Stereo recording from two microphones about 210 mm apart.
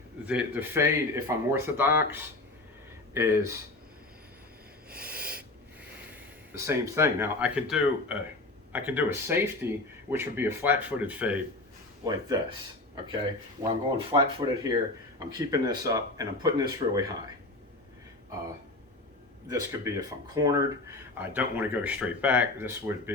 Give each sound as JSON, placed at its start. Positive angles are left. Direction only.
{"t": 0.3, "sound": "speech", "side_deg": -5}
{"t": 4.9, "sound": "owl", "side_deg": -45}
{"t": 6.5, "sound": "speech", "side_deg": -15}
{"t": 12.0, "sound": "speech", "side_deg": -20}
{"t": 13.6, "sound": "speech", "side_deg": -25}
{"t": 19.9, "sound": "speech", "side_deg": -15}